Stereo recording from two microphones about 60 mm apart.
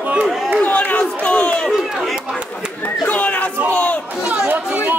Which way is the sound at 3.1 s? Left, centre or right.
Left.